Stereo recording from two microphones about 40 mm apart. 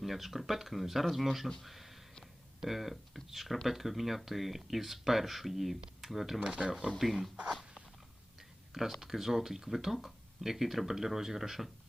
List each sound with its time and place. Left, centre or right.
0.0 s speech: centre
1.6 s a sound: centre
2.6 s speech: centre
7.0 s speech: centre
9.0 s speech: centre